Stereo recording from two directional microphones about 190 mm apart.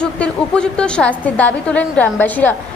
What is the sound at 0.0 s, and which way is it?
A woman's voice, 5° left (ahead or behind).